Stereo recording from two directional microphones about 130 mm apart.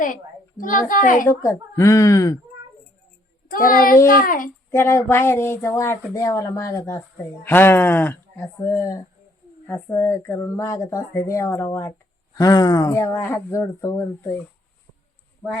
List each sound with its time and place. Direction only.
0.0 s a woman's voice: 90° left
1.3 s speech: 25° left (ahead or behind)
3.5 s a woman's voice: 90° left
4.7 s speech: 20° left (ahead or behind)
9.6 s speech: 20° left (ahead or behind)